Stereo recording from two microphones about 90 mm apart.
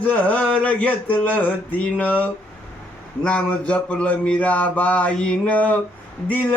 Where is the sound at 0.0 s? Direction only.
15° left (ahead or behind).